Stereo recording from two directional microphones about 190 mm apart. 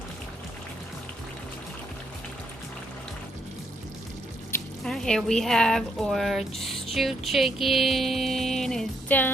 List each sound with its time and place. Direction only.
4.8 s speech: 5° left (ahead or behind)